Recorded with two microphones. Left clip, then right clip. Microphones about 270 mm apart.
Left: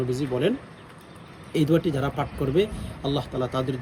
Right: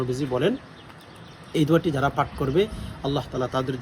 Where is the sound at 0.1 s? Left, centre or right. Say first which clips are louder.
Right 2 dB; centre.